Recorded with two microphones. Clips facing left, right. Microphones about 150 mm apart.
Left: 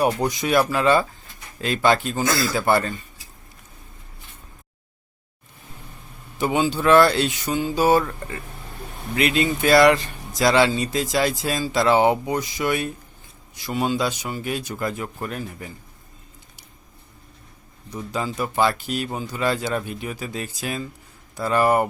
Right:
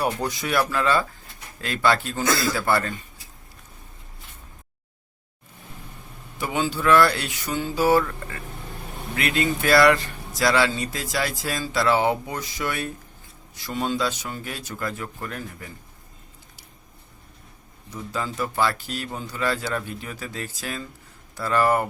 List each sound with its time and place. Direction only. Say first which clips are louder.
0.0 s speech: left 4 dB; 15° left (ahead or behind)
6.4 s speech: left 4 dB; 20° left (ahead or behind)
9.1 s speech: left 3 dB; 20° left (ahead or behind)
18.1 s speech: left 2 dB; 15° left (ahead or behind)